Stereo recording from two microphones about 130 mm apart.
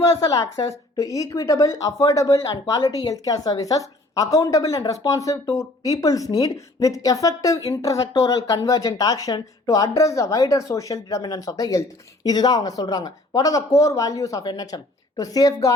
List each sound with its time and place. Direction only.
0.0 s a woman's voice: 25° left (ahead or behind)